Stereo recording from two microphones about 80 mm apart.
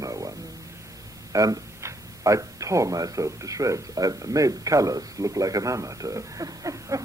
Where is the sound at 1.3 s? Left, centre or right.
Right.